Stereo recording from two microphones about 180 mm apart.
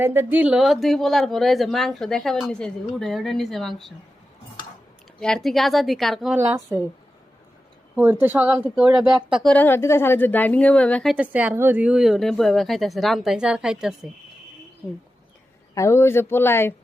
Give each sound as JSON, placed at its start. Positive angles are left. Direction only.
{"t": 0.0, "sound": "speech", "side_deg": -10}
{"t": 5.2, "sound": "speech", "side_deg": 5}
{"t": 6.3, "sound": "speech", "side_deg": -15}
{"t": 7.9, "sound": "speech", "side_deg": -10}
{"t": 11.1, "sound": "speech", "side_deg": -10}
{"t": 15.7, "sound": "speech", "side_deg": 15}